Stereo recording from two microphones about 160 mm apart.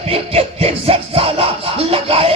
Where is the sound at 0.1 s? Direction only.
40° right (ahead or behind).